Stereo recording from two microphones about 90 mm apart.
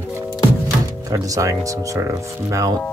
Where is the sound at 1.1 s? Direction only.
40° right (ahead or behind).